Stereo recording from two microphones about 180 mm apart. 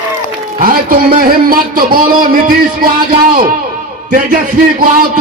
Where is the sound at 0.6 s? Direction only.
55° right (ahead or behind).